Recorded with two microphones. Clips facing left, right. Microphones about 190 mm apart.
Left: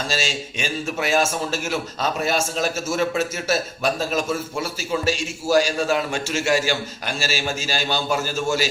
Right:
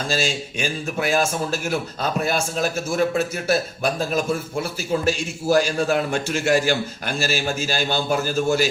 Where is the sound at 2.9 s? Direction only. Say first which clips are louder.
Right 2 dB; 55° right (ahead or behind).